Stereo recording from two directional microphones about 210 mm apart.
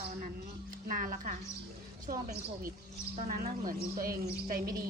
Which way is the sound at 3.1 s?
40° right (ahead or behind).